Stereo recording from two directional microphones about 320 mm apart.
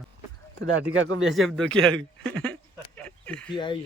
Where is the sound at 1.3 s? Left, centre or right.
Centre.